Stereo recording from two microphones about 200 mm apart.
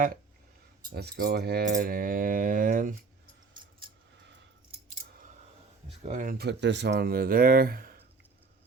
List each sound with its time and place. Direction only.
0.9 s speech: 55° right (ahead or behind)
3.5 s a sound: 25° right (ahead or behind)
6.0 s speech: 35° right (ahead or behind)